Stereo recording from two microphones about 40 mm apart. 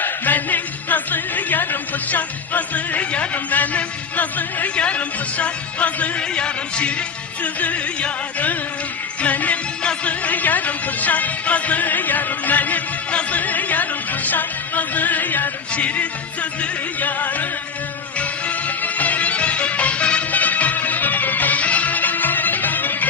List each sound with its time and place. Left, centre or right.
0.0 s music: left
3.3 s a man's voice: left
4.7 s music: left
6.3 s speech: left
7.4 s music: left
9.8 s speech: left
15.7 s music: left
18.8 s music: left
20.3 s music: left